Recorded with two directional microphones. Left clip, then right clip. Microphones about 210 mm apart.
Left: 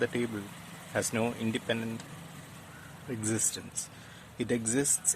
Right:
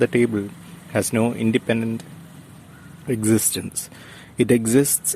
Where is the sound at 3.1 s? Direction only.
35° right (ahead or behind).